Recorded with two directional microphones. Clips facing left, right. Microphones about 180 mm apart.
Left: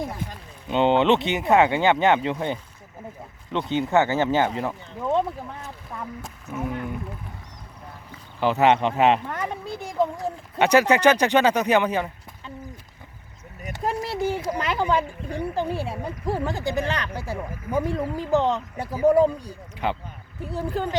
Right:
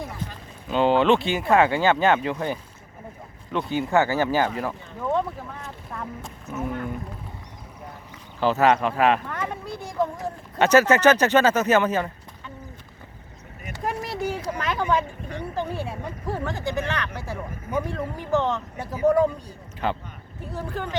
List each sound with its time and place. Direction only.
0.7 s speech: 25° left (ahead or behind)
3.7 s speech: 20° left (ahead or behind)
5.6 s speech: centre (ahead or behind)
8.4 s speech: 15° left (ahead or behind)
10.6 s speech: 15° left (ahead or behind)
13.7 s speech: 25° left (ahead or behind)
19.8 s speech: 15° left (ahead or behind)
20.7 s speech: 35° left (ahead or behind)